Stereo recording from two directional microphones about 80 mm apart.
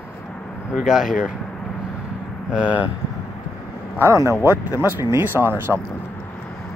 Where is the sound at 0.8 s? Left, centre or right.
Centre.